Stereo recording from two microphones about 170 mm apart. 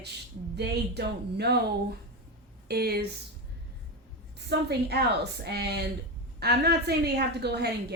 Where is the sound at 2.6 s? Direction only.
65° right (ahead or behind).